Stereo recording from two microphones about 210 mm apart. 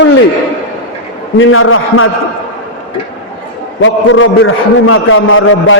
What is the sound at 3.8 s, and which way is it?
A man's voice, 70° left (ahead or behind).